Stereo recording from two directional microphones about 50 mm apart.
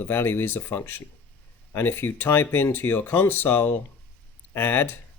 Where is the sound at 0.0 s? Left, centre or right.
Left.